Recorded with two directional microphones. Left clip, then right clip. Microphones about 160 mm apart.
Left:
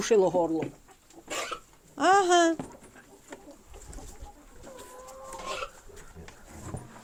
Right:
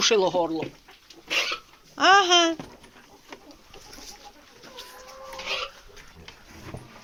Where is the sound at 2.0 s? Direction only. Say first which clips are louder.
Right 4 dB; 30° left (ahead or behind).